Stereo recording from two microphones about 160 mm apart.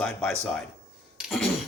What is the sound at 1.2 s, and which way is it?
Throat clearing, centre (ahead or behind).